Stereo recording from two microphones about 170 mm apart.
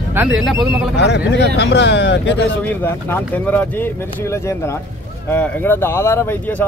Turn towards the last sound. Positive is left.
turn(degrees=15)  # may be behind; listen again after turning